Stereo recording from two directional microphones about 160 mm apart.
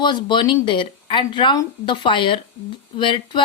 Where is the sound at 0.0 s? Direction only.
30° left (ahead or behind).